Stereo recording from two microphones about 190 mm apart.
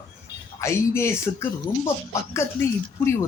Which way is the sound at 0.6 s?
15° left (ahead or behind).